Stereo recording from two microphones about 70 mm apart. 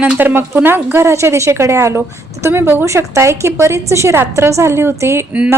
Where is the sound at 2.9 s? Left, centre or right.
Right.